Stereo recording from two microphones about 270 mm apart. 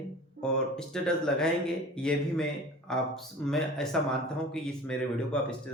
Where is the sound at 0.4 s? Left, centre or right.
Centre.